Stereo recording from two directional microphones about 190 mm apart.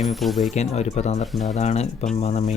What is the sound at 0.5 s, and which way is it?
Speech, 35° left (ahead or behind).